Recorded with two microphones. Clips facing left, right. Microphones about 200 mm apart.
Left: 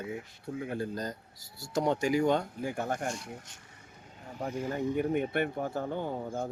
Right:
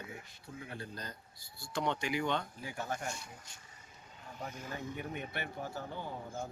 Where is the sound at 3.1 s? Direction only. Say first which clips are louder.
Left 8 dB; 80° left.